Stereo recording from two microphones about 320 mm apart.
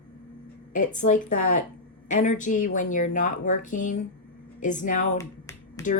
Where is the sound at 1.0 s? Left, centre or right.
Left.